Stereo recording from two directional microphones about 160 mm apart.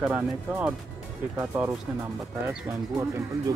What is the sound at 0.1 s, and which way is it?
Speech, 10° right (ahead or behind).